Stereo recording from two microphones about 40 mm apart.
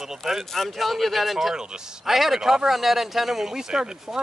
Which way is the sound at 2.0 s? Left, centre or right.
Centre.